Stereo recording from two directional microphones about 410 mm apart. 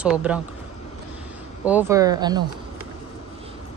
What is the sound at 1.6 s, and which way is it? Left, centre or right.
Speech, centre.